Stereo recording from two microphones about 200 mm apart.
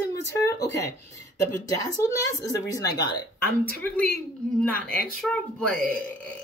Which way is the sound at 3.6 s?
5° left (ahead or behind).